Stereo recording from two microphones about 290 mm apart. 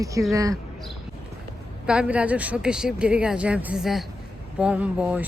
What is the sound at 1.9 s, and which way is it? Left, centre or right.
Speech, centre.